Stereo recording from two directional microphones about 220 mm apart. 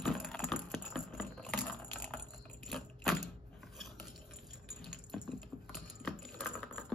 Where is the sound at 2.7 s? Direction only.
Centre (ahead or behind).